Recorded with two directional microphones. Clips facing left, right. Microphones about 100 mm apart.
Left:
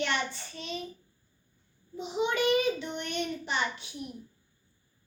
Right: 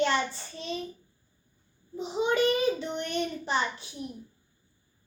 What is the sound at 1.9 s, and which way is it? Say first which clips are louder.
Child singing: right 3 dB; 40° right (ahead or behind).